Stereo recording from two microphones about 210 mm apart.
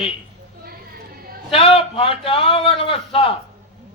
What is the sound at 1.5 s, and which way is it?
A man's voice, 25° left (ahead or behind).